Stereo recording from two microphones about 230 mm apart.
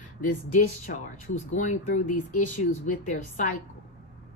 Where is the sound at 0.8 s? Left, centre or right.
Left.